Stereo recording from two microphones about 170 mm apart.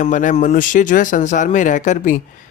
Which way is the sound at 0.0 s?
45° left (ahead or behind).